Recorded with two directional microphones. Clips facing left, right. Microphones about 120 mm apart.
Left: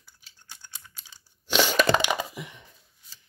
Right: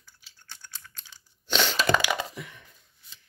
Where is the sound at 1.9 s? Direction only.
25° left (ahead or behind).